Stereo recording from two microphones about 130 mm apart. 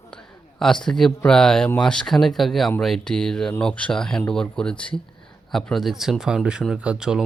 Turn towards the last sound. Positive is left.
turn(degrees=-5)  # may be behind; listen again after turning